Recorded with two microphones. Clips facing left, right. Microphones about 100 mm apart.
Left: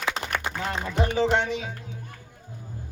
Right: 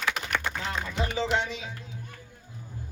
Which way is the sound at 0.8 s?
45° left (ahead or behind).